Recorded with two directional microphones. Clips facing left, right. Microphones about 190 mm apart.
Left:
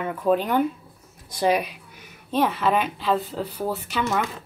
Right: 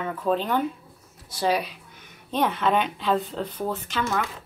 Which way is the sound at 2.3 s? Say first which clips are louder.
Left 1 dB; centre (ahead or behind).